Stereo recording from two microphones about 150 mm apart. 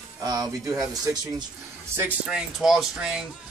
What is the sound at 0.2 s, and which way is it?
Speech, 25° right (ahead or behind).